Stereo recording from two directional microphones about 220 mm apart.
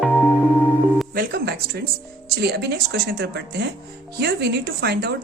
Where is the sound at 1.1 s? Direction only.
45° right (ahead or behind).